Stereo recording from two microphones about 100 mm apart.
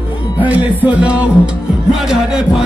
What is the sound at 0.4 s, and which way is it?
Music, 15° right (ahead or behind).